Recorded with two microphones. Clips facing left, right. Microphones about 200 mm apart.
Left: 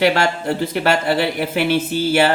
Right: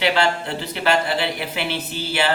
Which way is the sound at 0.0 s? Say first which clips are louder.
Left 3 dB; 45° left (ahead or behind).